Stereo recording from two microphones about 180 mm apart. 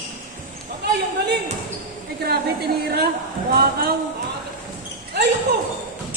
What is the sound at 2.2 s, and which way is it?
A woman's voice, 60° right (ahead or behind).